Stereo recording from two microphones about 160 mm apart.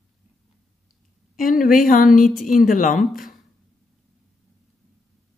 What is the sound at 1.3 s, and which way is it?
A woman's voice, 60° left (ahead or behind).